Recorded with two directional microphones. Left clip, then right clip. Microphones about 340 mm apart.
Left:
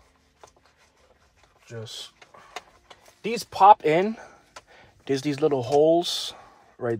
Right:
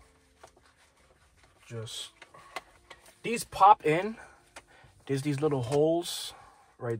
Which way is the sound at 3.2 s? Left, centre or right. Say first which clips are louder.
Left 5 dB; left.